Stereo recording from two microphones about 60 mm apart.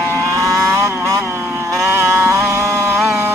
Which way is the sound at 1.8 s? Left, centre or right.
Right.